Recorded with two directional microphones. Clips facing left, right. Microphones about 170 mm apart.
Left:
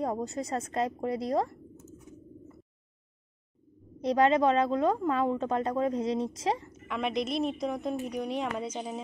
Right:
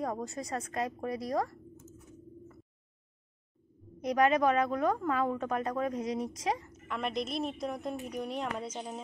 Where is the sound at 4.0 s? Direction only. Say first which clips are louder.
Left 3 dB; 30° left (ahead or behind).